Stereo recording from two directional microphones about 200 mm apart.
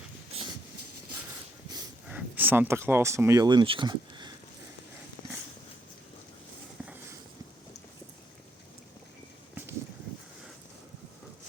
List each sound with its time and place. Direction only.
2.0 s speech: 5° right (ahead or behind)
6.8 s walk: 5° right (ahead or behind)